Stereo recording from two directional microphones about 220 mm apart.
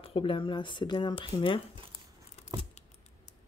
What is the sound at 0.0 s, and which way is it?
Speech, 25° left (ahead or behind).